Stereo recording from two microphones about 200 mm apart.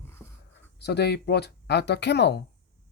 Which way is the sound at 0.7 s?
60° left (ahead or behind).